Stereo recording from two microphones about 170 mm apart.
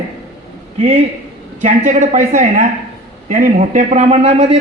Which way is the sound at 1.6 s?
45° right (ahead or behind).